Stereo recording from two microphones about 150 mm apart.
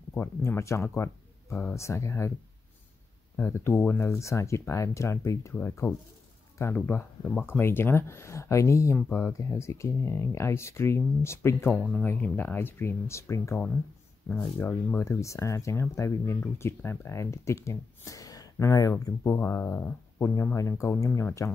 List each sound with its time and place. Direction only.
0.1 s speech: 15° left (ahead or behind)
3.3 s speech: 15° left (ahead or behind)
11.7 s speech: 5° left (ahead or behind); by 21.5 s 20° left (ahead or behind)